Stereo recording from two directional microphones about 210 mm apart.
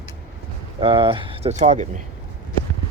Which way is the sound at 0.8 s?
25° right (ahead or behind).